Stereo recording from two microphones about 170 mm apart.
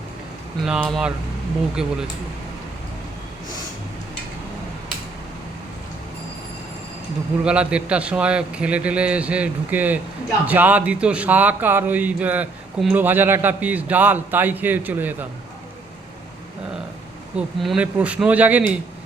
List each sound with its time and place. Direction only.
0.6 s speech: 5° right (ahead or behind)
7.4 s speech: 5° right (ahead or behind)
17.3 s speech: 5° right (ahead or behind)